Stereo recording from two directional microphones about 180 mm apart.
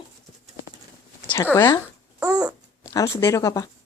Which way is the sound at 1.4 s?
20° left (ahead or behind).